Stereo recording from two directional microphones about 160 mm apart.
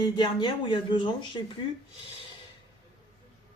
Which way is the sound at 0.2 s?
30° left (ahead or behind).